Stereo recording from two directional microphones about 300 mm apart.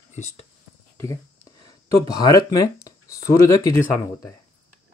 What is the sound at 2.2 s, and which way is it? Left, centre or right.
Speech, centre.